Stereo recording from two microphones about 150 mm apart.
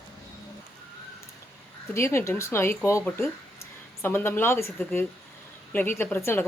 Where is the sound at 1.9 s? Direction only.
20° left (ahead or behind).